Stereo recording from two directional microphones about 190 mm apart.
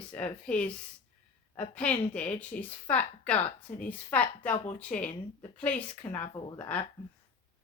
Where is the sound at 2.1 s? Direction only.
5° left (ahead or behind).